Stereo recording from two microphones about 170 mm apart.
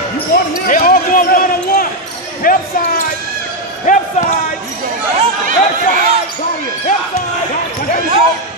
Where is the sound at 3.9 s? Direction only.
50° left (ahead or behind).